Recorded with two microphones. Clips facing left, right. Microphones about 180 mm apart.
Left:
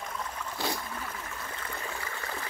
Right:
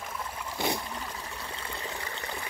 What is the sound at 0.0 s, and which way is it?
Trickle, 5° right (ahead or behind).